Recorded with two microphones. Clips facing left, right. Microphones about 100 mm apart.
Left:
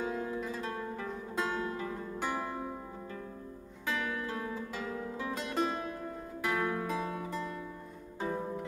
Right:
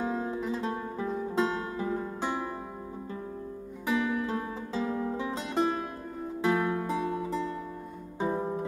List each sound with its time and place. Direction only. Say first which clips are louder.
0.0 s music: right 4 dB; 25° right (ahead or behind)
3.8 s music: right 7 dB; 20° right (ahead or behind)